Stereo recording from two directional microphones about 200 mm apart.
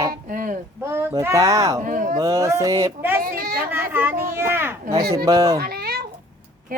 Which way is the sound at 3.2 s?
45° right (ahead or behind).